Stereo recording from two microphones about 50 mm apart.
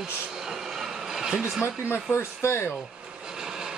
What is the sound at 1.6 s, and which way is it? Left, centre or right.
Speech, left.